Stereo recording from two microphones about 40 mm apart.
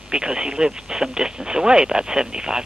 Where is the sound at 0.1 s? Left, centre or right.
Centre.